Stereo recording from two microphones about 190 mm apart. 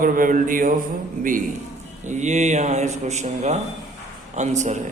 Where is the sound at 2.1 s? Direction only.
40° right (ahead or behind).